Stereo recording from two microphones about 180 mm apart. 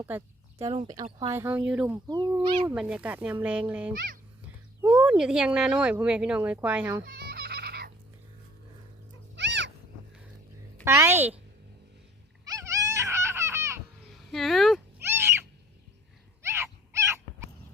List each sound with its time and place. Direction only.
0.6 s speech: 25° right (ahead or behind)
1.3 s speech: 15° right (ahead or behind)
2.0 s speech: 25° right (ahead or behind)
2.3 s speech: 10° right (ahead or behind)
3.9 s a child's voice: 50° right (ahead or behind)
4.8 s speech: 10° right (ahead or behind)
7.0 s turkey: 60° right (ahead or behind)
9.3 s cat: 80° right
10.8 s speech: 15° right (ahead or behind)
12.5 s a sound: 15° right (ahead or behind)
14.3 s speech: centre (ahead or behind)
15.0 s cat: 15° right (ahead or behind)
16.4 s dog: 15° right (ahead or behind)